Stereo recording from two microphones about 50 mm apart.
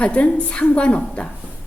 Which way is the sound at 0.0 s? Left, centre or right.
Left.